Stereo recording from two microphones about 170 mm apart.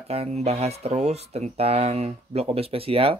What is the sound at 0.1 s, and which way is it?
Speech, 40° right (ahead or behind).